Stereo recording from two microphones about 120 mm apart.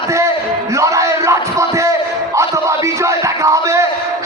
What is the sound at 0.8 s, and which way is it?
Bellow, 25° right (ahead or behind).